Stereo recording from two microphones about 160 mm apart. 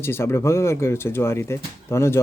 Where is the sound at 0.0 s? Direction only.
15° left (ahead or behind).